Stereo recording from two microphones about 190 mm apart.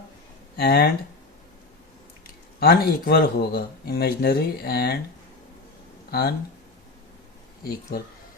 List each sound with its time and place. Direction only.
0.5 s speech: 55° left (ahead or behind)
2.2 s speech: 55° left (ahead or behind)
6.1 s speech: 55° left (ahead or behind)
7.6 s speech: 50° left (ahead or behind)